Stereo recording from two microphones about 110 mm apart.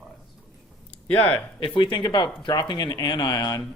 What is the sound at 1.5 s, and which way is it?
A man's voice, 50° left (ahead or behind).